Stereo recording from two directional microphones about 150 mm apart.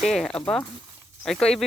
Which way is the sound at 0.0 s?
Centre (ahead or behind).